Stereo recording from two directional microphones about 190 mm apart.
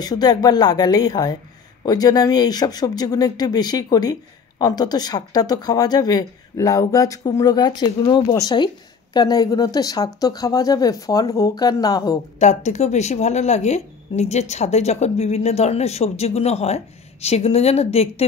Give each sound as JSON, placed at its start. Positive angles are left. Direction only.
{"t": 0.0, "sound": "speech", "side_deg": 20}
{"t": 12.4, "sound": "speech", "side_deg": 35}